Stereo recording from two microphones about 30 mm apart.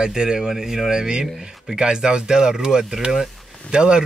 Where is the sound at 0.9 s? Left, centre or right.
Right.